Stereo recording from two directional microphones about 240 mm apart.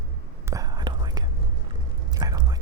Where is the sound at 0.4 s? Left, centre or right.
Centre.